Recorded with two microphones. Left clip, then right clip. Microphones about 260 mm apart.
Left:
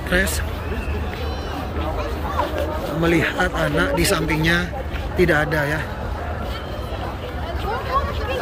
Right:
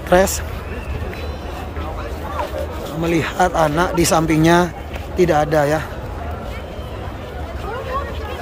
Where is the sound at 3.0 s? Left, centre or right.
Centre.